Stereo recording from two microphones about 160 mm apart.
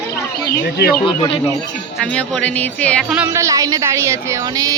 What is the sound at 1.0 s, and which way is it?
Speech, 30° left (ahead or behind).